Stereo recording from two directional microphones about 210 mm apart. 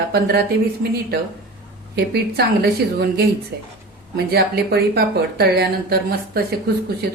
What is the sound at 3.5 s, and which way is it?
Speech, 50° right (ahead or behind).